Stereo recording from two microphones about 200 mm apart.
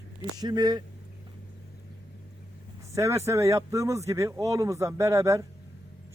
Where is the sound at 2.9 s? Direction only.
15° right (ahead or behind).